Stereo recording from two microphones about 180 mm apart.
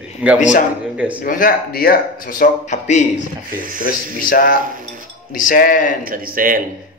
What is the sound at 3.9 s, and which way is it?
Speech, 55° left (ahead or behind).